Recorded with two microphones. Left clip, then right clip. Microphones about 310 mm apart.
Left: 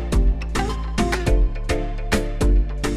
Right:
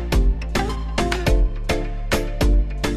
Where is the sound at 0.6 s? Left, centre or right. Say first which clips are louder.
Right 1 dB; centre.